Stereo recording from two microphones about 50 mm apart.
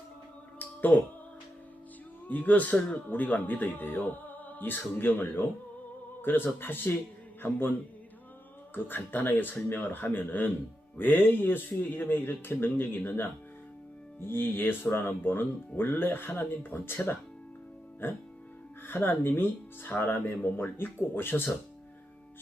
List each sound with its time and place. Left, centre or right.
0.6 s a sound: left
2.2 s speech: left
8.7 s speech: left
18.9 s speech: left